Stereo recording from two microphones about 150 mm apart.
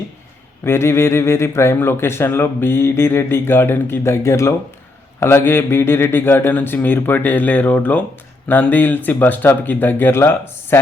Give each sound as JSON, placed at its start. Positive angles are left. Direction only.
{"t": 0.6, "sound": "speech", "side_deg": 15}